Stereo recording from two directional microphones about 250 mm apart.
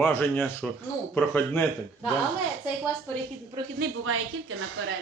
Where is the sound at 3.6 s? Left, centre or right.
Centre.